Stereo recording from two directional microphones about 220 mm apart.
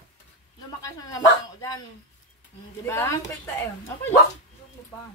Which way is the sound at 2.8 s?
15° left (ahead or behind).